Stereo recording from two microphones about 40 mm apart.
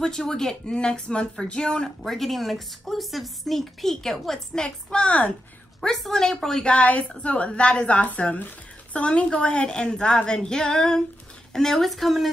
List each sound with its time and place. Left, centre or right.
0.0 s speech: centre
0.7 s a woman's voice: left
2.0 s a woman's voice: centre
4.9 s a woman's voice: left
5.8 s speech: centre
6.6 s a woman's voice: left; by 12.3 s centre